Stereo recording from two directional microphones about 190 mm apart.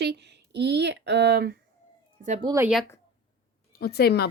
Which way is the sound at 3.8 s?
55° left (ahead or behind).